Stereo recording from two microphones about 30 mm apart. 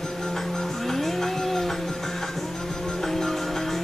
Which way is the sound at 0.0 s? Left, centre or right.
Centre.